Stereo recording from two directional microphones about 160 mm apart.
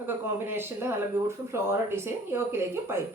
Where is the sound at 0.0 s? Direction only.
15° right (ahead or behind).